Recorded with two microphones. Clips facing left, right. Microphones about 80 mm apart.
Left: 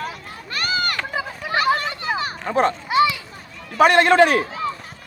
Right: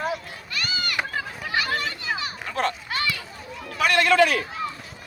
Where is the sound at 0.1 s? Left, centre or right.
Left.